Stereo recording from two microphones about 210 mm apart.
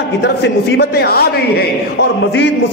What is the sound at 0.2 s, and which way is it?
A man's voice, 55° left (ahead or behind).